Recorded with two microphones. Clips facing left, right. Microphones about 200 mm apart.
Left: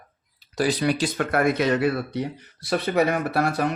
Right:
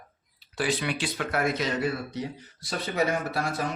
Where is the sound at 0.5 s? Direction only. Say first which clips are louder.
Left 6 dB; 40° left (ahead or behind); by 3.7 s 60° left (ahead or behind).